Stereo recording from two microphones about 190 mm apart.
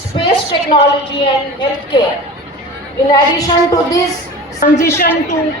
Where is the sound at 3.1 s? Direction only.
20° left (ahead or behind).